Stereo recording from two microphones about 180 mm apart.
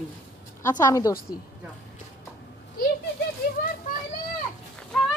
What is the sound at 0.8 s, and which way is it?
Speech, 20° left (ahead or behind).